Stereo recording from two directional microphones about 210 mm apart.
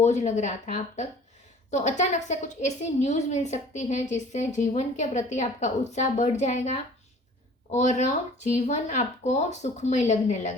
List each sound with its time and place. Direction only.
0.0 s a woman's voice: 35° left (ahead or behind)